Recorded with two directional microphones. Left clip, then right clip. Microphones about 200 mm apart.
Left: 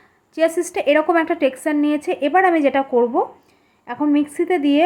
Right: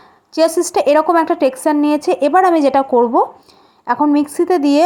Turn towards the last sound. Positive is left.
turn(degrees=-20)  # may be behind; listen again after turning